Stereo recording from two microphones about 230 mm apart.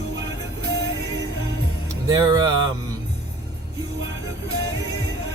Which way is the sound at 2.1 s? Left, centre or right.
Centre.